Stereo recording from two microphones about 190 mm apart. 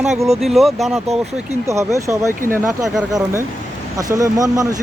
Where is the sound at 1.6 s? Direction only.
15° right (ahead or behind).